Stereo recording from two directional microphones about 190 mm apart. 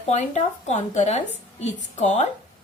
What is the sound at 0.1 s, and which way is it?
A woman's voice, 35° left (ahead or behind).